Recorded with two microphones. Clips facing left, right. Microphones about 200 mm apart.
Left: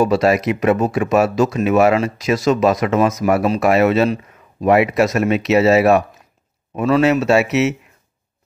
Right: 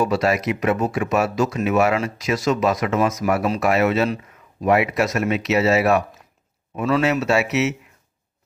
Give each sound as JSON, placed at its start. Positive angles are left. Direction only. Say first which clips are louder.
{"t": 0.0, "sound": "speech", "louder": "left 5 dB", "side_deg": 30}